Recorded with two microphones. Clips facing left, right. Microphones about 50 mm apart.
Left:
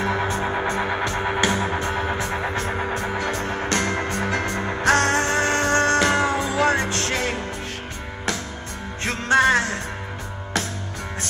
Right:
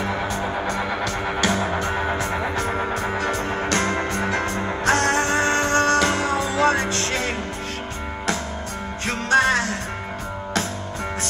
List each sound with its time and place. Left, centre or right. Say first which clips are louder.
0.5 s music: left 1 dB; left
3.3 s music: right 1 dB; right
4.9 s music: even; left
5.3 s music: even; right
5.8 s music: left 1 dB; left
9.0 s music: left 1 dB; left